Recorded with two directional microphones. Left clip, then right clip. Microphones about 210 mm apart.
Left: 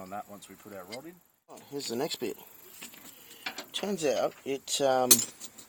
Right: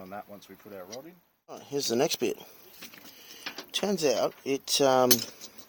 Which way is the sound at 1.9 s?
35° right (ahead or behind).